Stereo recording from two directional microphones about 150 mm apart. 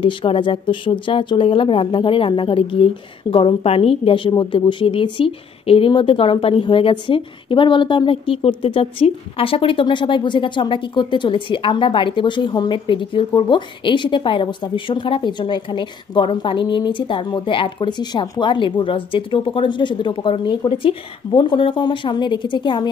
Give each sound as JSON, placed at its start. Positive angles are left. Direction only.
{"t": 0.0, "sound": "speech", "side_deg": 35}